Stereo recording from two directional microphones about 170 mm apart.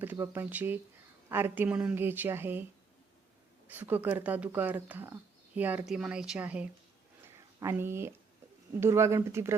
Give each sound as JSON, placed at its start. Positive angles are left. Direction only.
{"t": 0.0, "sound": "speech", "side_deg": -10}
{"t": 3.7, "sound": "a woman's voice", "side_deg": -10}